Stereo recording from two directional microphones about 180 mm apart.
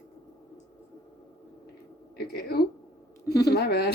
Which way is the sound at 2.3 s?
60° left (ahead or behind).